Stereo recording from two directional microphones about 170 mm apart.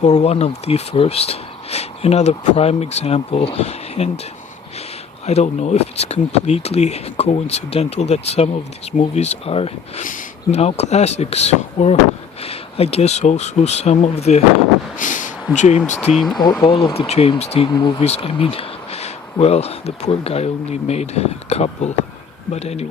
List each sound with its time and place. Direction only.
0.0 s speech: 40° left (ahead or behind)
5.2 s speech: 40° left (ahead or behind)
10.0 s speech: 45° left (ahead or behind)
14.9 s vehicle: 50° left (ahead or behind)
15.5 s speech: 45° left (ahead or behind)
16.1 s speech: centre (ahead or behind)
16.4 s speech: 25° left (ahead or behind)
17.7 s speech: 25° left (ahead or behind)
18.0 s speech: 35° left (ahead or behind)